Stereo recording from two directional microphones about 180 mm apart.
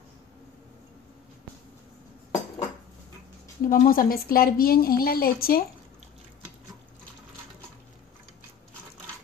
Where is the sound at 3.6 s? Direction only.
50° left (ahead or behind).